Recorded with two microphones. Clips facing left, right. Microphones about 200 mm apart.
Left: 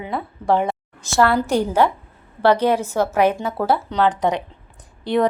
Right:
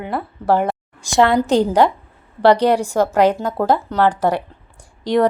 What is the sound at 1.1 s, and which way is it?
A woman's voice, 15° right (ahead or behind).